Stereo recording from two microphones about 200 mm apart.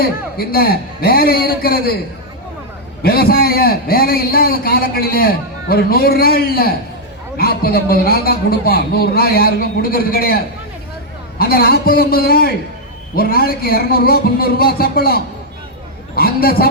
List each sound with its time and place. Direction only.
0.0 s a man's voice: 50° left (ahead or behind)
3.0 s a man's voice: 50° left (ahead or behind)